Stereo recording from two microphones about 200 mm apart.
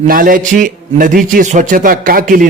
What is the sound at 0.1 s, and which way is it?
A man's voice, 45° right (ahead or behind).